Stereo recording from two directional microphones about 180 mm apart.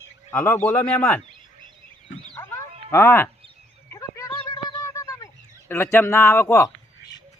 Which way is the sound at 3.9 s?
20° left (ahead or behind).